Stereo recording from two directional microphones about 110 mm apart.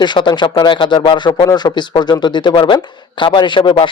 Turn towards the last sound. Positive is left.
turn(degrees=50)  # may be behind; listen again after turning